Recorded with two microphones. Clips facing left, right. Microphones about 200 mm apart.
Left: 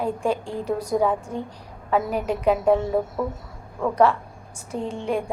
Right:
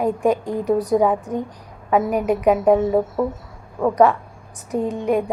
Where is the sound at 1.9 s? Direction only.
10° right (ahead or behind).